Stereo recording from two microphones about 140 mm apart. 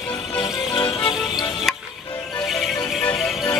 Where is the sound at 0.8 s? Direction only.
40° left (ahead or behind).